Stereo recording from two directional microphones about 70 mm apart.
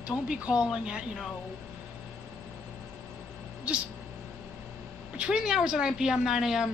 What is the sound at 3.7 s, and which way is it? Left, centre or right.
Speech, centre.